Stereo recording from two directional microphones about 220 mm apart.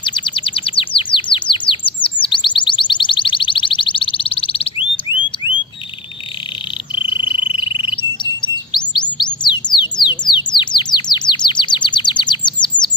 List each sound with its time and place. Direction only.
0.0 s chirp: 20° left (ahead or behind)
2.2 s a sound: 20° left (ahead or behind)
7.1 s frog: 20° left (ahead or behind)
7.9 s chirp: 20° left (ahead or behind)